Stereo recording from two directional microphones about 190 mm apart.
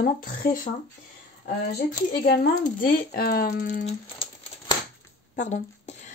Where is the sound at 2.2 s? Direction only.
55° left (ahead or behind).